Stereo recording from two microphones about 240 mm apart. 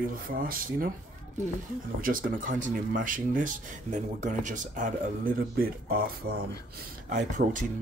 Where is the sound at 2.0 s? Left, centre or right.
Right.